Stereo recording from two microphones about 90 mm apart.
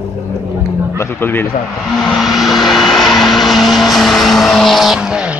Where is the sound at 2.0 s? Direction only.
Centre (ahead or behind).